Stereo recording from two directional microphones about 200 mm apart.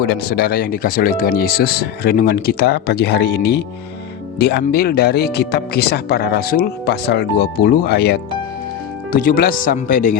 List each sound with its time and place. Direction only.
0.0 s speech: 50° left (ahead or behind)
9.1 s speech: 45° left (ahead or behind)